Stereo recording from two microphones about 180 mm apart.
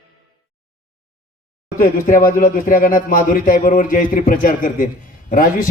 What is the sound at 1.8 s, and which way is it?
A man's voice, 45° left (ahead or behind).